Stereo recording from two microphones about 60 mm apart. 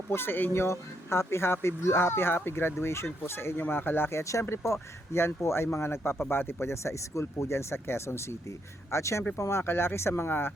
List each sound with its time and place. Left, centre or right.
0.1 s speech: left
4.2 s speech: left